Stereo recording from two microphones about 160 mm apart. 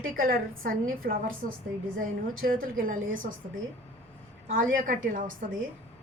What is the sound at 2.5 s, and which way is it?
Speech, 60° right (ahead or behind).